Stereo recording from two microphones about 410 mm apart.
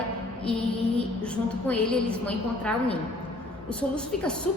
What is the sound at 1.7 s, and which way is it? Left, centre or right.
A woman's voice, centre.